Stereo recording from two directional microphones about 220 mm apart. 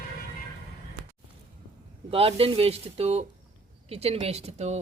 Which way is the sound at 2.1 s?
25° right (ahead or behind).